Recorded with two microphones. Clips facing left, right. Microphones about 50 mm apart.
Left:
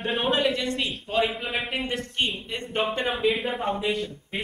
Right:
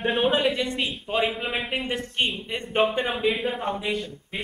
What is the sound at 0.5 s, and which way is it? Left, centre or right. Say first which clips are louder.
Speech: right 1 dB; centre.